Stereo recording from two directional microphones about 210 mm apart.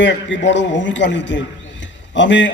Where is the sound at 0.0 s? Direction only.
60° left (ahead or behind).